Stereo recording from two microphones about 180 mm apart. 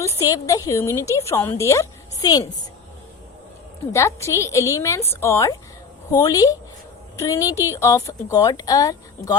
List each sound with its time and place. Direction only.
0.0 s a woman's voice: 15° left (ahead or behind)
3.9 s a woman's voice: 15° left (ahead or behind)